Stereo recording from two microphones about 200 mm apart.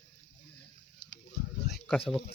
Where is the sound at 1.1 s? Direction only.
55° left (ahead or behind).